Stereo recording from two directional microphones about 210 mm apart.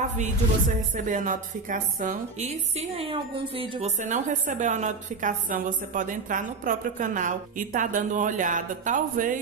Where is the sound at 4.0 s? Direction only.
35° right (ahead or behind).